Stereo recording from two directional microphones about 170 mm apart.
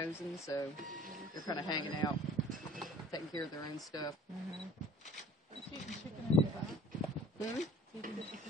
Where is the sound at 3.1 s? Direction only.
20° left (ahead or behind).